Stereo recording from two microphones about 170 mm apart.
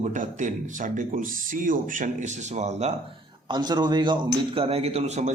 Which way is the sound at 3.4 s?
25° right (ahead or behind).